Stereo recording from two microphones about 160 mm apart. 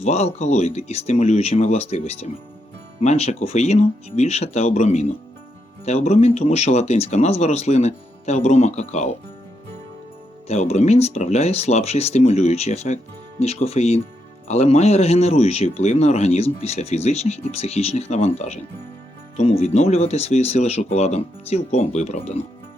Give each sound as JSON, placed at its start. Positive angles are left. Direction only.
{"t": 0.0, "sound": "speech", "side_deg": 45}
{"t": 10.5, "sound": "speech", "side_deg": 45}